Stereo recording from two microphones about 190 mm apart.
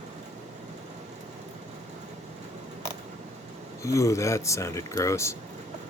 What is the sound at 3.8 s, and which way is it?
Speech, 15° left (ahead or behind).